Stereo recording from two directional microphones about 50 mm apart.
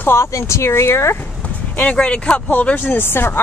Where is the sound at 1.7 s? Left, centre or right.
Left.